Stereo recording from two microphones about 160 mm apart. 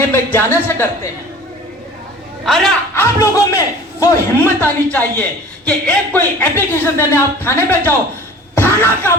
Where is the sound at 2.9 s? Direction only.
20° left (ahead or behind).